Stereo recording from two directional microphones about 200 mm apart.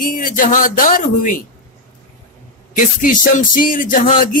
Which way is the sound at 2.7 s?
40° left (ahead or behind).